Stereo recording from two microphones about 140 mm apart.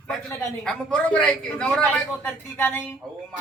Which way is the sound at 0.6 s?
5° left (ahead or behind).